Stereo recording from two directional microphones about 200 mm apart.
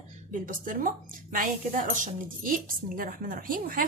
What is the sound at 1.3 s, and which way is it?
A woman's voice, 40° right (ahead or behind).